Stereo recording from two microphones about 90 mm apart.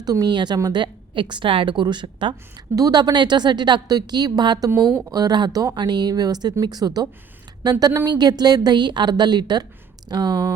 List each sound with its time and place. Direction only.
0.0 s a woman's voice: 45° right (ahead or behind); by 2.3 s 65° right (ahead or behind)
2.7 s a woman's voice: 45° right (ahead or behind)